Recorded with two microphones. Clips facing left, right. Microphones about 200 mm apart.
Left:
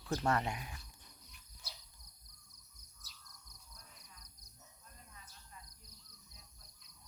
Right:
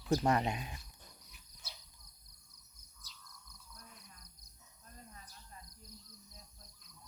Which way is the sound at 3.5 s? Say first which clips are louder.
Right 5 dB; 60° right (ahead or behind).